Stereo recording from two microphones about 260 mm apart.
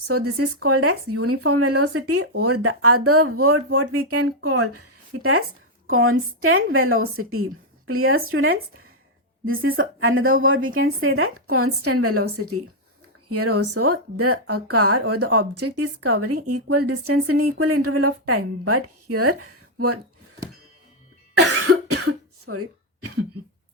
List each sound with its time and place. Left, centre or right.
0.0 s a woman's voice: right
21.7 s cough: right